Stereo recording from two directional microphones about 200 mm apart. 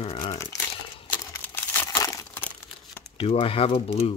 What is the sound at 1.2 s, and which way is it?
Crumpling, 10° left (ahead or behind).